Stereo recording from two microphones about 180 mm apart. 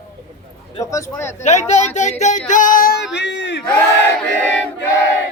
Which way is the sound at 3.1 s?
75° left (ahead or behind).